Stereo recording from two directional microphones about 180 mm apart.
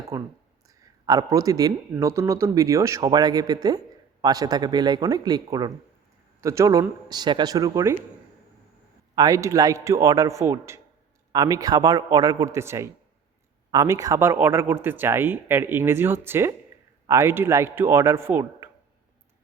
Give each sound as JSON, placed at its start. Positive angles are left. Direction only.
{"t": 0.1, "sound": "speech", "side_deg": -15}
{"t": 9.1, "sound": "speech", "side_deg": -20}